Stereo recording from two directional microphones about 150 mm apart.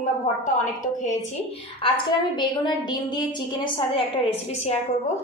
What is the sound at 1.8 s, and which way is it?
A woman's voice, 30° left (ahead or behind).